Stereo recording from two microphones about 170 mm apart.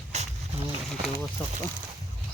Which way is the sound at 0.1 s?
40° right (ahead or behind).